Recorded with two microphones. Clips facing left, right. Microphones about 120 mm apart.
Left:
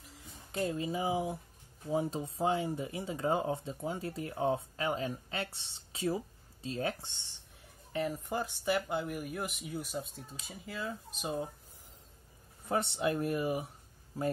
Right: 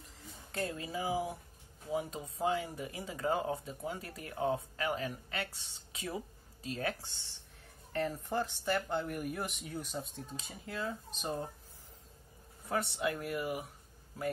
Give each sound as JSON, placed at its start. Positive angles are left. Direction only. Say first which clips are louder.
{"t": 0.5, "sound": "speech", "louder": "left 4 dB", "side_deg": 20}
{"t": 7.9, "sound": "speech", "louder": "even", "side_deg": 10}
{"t": 12.6, "sound": "speech", "louder": "left 3 dB", "side_deg": 25}